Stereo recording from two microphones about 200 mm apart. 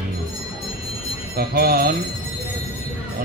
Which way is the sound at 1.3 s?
50° right (ahead or behind).